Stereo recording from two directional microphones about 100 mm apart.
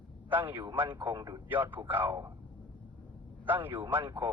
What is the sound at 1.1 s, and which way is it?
Speech, 40° right (ahead or behind).